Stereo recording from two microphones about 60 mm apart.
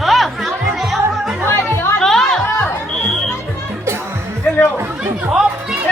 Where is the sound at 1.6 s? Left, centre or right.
Left.